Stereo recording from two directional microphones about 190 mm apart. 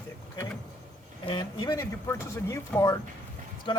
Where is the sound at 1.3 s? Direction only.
25° left (ahead or behind).